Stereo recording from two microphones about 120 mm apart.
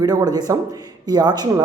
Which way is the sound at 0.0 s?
35° right (ahead or behind).